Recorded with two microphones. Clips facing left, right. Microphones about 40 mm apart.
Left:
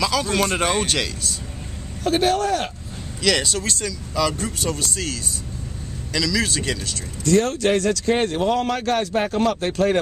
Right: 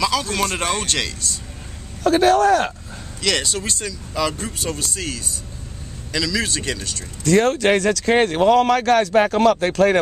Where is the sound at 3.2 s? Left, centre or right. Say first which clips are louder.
Left 1 dB; centre.